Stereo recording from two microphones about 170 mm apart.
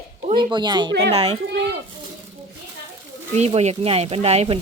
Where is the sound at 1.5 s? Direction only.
90° right.